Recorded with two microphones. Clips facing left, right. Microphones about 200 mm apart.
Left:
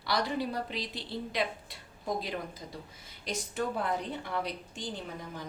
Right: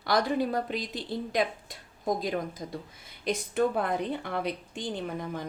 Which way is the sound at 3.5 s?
60° right (ahead or behind).